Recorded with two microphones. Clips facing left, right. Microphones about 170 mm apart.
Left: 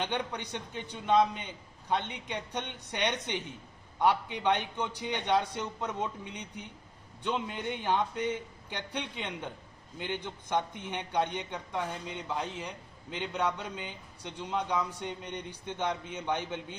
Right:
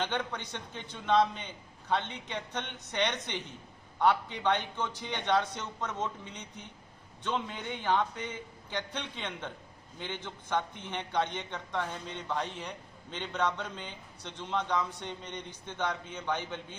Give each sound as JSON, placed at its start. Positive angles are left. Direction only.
{"t": 0.0, "sound": "a man's voice", "side_deg": 15}